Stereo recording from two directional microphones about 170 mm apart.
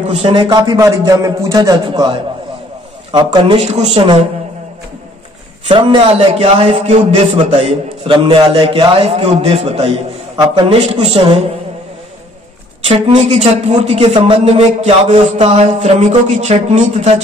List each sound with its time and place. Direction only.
0.1 s a man's voice: 35° right (ahead or behind)
3.5 s a woman's voice: 40° right (ahead or behind)
5.7 s a woman's voice: 30° right (ahead or behind)
12.8 s a woman's voice: 35° right (ahead or behind)